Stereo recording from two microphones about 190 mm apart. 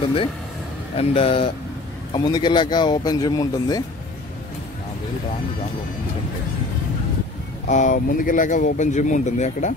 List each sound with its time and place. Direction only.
0.9 s speech: 30° left (ahead or behind)
7.6 s speech: 40° left (ahead or behind)